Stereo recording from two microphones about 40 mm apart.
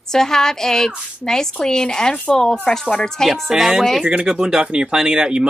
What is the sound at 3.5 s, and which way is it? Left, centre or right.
Speech, centre.